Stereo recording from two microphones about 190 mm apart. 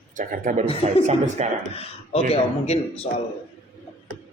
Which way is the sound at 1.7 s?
30° left (ahead or behind).